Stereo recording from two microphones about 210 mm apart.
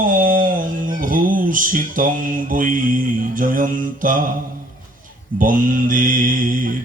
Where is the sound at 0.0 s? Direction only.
40° right (ahead or behind).